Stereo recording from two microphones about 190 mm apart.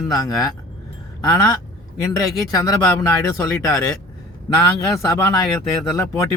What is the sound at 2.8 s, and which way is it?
Speech, 15° left (ahead or behind).